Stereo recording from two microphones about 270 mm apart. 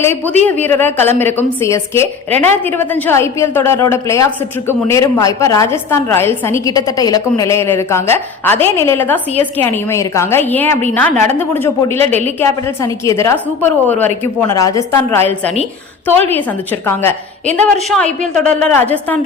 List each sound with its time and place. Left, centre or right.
0.4 s a woman's voice: centre
15.2 s a woman's voice: right
16.0 s a woman's voice: centre